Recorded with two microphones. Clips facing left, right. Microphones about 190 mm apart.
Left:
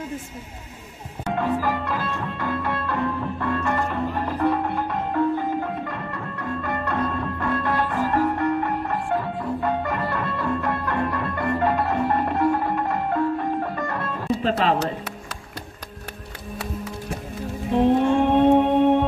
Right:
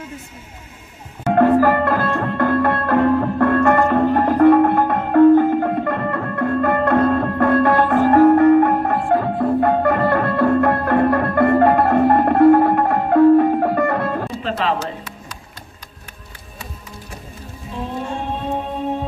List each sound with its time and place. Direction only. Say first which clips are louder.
1.3 s music: right 10 dB; 60° right (ahead or behind)
14.4 s music: left 1 dB; 40° left (ahead or behind)
17.6 s music: left 9 dB; 65° left (ahead or behind)